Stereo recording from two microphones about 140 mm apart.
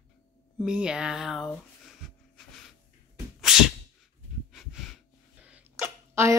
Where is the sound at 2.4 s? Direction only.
5° left (ahead or behind).